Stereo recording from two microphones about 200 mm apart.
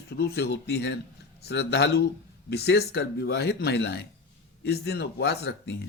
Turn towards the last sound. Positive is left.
turn(degrees=55)  # may be behind; listen again after turning